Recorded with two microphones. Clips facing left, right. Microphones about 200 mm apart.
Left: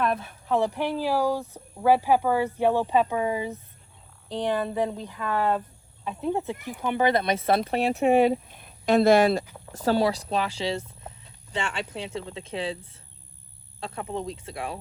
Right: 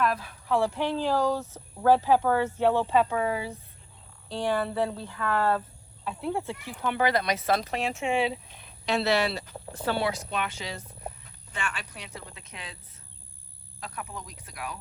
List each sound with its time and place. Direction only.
0.0 s speech: 25° left (ahead or behind)
8.0 s speech: 50° left (ahead or behind); by 14.8 s 30° left (ahead or behind)